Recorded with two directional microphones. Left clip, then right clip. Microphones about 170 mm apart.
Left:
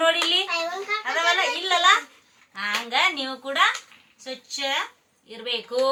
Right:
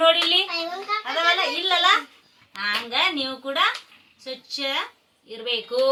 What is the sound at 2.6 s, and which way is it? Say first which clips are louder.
A woman's voice: even; 15° left (ahead or behind).